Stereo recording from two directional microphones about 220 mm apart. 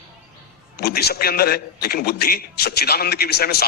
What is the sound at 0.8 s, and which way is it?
A man's voice, 45° left (ahead or behind).